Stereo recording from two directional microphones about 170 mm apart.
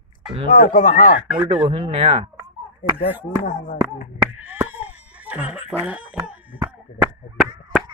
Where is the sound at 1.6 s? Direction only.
35° right (ahead or behind).